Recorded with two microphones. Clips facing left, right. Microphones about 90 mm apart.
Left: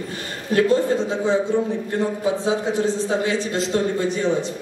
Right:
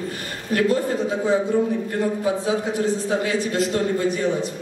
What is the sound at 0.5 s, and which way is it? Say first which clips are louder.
Speech: left 3 dB; 25° left (ahead or behind).